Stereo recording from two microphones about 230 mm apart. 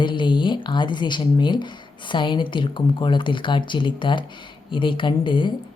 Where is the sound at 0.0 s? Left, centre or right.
Left.